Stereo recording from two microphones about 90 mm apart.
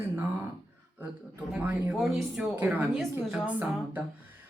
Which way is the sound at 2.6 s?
20° right (ahead or behind).